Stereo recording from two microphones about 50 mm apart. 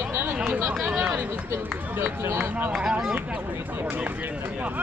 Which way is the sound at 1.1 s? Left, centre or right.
Right.